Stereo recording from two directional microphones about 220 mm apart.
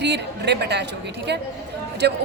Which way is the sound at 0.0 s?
50° right (ahead or behind).